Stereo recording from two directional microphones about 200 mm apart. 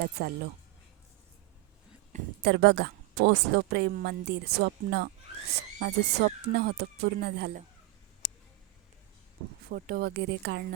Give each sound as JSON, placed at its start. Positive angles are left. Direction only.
{"t": 0.0, "sound": "a woman's voice", "side_deg": -55}
{"t": 2.4, "sound": "a woman's voice", "side_deg": -55}
{"t": 9.6, "sound": "a woman's voice", "side_deg": -50}